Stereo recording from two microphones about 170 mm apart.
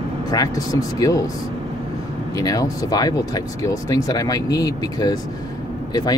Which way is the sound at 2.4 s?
20° left (ahead or behind).